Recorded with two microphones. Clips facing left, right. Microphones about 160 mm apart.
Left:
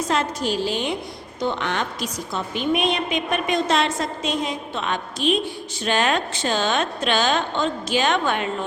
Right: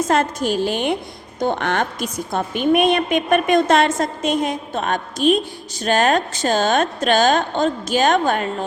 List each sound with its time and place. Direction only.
0.0 s a woman's voice: 50° right (ahead or behind)